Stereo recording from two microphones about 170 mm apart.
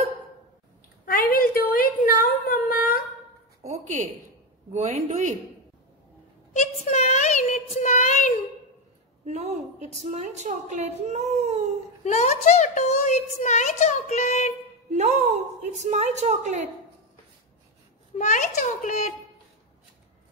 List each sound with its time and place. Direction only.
1.0 s a sound: 55° left (ahead or behind)
3.6 s a sound: 45° right (ahead or behind)
4.7 s a woman's voice: 45° right (ahead or behind)
6.5 s a child's voice: 40° left (ahead or behind)
9.2 s a woman's voice: 40° right (ahead or behind)
12.0 s a woman's voice: 40° left (ahead or behind)
14.9 s a woman's voice: 40° right (ahead or behind)
18.1 s a woman's voice: 45° left (ahead or behind)